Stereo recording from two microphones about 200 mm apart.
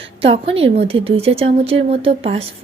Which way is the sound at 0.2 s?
30° right (ahead or behind).